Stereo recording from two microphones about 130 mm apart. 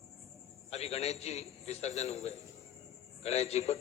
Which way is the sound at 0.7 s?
55° left (ahead or behind).